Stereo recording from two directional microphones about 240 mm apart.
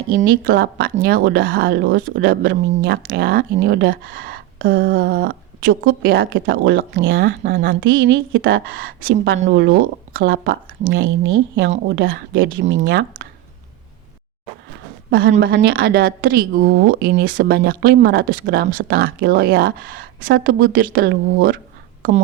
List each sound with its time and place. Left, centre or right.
0.2 s a woman's voice: right
6.1 s speech: right
9.0 s speech: right
15.1 s a woman's voice: right